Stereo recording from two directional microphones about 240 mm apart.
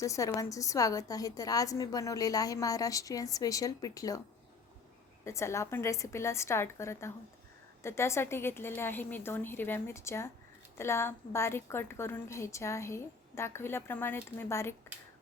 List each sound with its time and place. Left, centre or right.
0.0 s a woman's voice: centre
5.2 s a woman's voice: centre